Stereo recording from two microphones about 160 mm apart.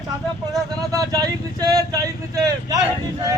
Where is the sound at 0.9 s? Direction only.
20° right (ahead or behind).